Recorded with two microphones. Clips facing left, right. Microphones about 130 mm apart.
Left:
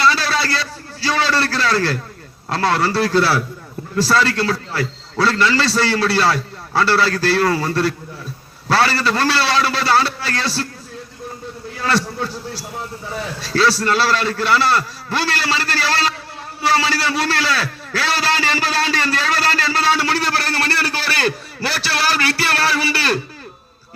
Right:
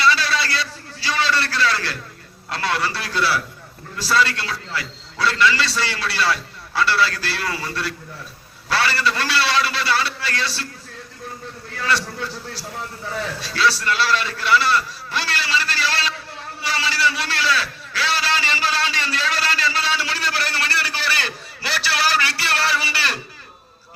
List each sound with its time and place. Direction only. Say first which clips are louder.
0.0 s a sound: left 2 dB; 40° left (ahead or behind)
2.5 s a man's voice: left 6 dB; 40° left (ahead or behind)
13.4 s a man's voice: left 5 dB; 40° left (ahead or behind)